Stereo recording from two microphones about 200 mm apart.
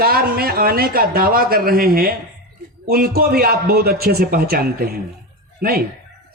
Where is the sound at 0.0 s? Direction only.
50° right (ahead or behind).